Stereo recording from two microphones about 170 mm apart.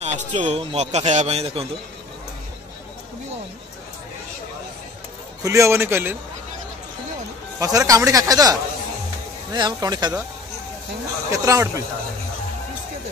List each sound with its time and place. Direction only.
0.0 s a man's voice: 45° right (ahead or behind)
5.4 s a man's voice: 15° right (ahead or behind)
7.5 s speech: 20° right (ahead or behind)
11.2 s a man's voice: 20° right (ahead or behind)